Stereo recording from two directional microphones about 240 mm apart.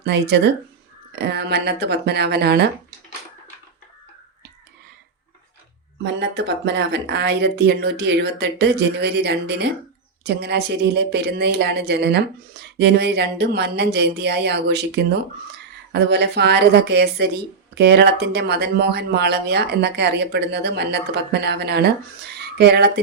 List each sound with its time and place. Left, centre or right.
0.0 s speech: right
6.0 s speech: right